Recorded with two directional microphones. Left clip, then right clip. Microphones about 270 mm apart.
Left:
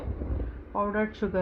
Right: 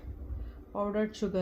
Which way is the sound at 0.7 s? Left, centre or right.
Centre.